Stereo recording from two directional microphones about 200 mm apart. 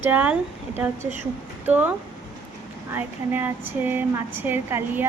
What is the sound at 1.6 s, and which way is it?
Speech, 10° right (ahead or behind).